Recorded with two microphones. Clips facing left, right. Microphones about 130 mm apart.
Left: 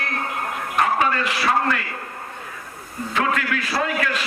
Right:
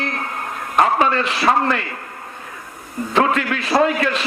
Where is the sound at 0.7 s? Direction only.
30° right (ahead or behind).